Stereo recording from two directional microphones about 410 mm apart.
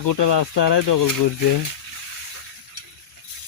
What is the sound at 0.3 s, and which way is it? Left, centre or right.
Speech, left.